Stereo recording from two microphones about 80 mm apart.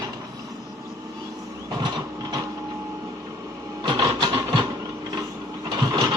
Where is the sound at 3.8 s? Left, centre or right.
Right.